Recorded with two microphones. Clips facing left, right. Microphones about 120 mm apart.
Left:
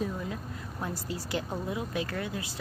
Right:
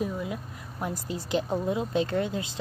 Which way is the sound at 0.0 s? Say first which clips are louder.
Right 3 dB; 10° right (ahead or behind).